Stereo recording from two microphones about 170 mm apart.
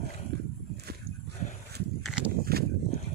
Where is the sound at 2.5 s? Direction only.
65° right (ahead or behind).